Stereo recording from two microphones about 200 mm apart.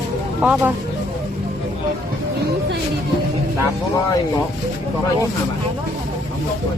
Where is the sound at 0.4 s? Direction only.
10° right (ahead or behind).